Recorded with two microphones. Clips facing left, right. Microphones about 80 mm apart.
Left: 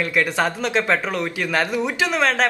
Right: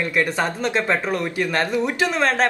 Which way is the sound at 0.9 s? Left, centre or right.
Centre.